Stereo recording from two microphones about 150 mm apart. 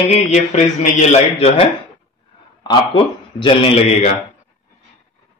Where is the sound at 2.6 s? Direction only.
30° left (ahead or behind).